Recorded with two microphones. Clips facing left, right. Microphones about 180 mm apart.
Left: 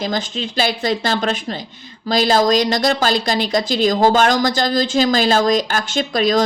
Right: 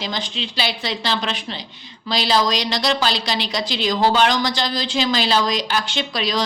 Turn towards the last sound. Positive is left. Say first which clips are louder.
# left 7 dB
turn(degrees=45)  # may be behind; listen again after turning